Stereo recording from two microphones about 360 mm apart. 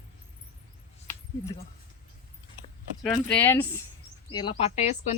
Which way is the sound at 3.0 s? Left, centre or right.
Centre.